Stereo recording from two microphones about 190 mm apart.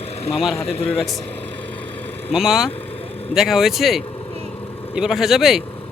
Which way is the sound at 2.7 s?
30° left (ahead or behind).